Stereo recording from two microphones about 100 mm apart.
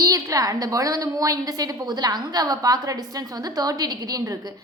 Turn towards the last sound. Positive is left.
turn(degrees=-35)  # may be behind; listen again after turning